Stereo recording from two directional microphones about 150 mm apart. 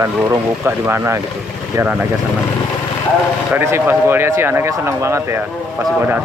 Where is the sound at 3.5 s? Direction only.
15° right (ahead or behind).